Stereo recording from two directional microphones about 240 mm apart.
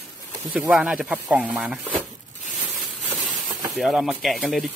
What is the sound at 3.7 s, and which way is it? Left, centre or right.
Speech, centre.